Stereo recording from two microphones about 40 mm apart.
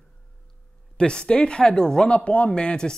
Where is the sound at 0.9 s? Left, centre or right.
Left.